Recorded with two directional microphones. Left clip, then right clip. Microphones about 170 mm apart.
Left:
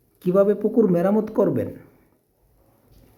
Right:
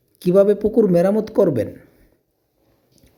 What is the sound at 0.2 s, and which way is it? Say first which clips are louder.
Speech: right 4 dB; 20° right (ahead or behind).